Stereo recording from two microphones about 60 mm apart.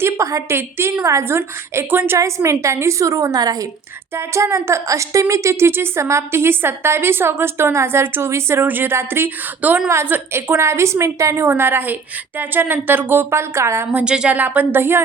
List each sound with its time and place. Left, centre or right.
0.0 s a woman's voice: right
0.5 s a woman's voice: right
2.1 s a woman's voice: right
4.1 s a woman's voice: right
8.6 s speech: right
10.1 s a woman's voice: right
11.4 s speech: right
13.3 s a woman's voice: right
14.0 s a woman's voice: centre
14.3 s speech: right